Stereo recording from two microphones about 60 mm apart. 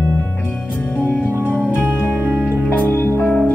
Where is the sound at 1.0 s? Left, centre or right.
Left.